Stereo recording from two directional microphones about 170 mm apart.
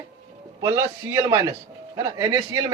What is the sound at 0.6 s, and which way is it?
Speech, 20° right (ahead or behind).